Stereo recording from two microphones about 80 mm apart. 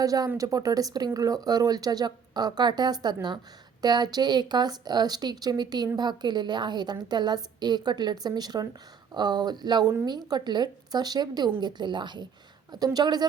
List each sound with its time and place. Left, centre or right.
0.0 s speech: right
12.7 s speech: right